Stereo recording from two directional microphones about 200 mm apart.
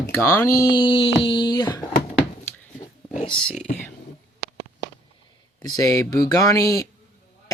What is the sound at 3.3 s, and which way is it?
Speech, 5° left (ahead or behind).